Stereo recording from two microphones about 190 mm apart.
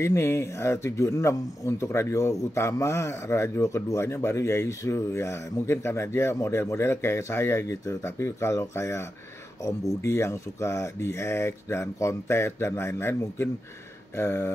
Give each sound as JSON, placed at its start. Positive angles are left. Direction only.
{"t": 0.0, "sound": "speech", "side_deg": 15}